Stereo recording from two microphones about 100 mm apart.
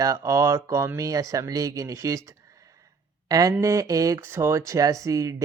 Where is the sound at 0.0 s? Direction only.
30° right (ahead or behind).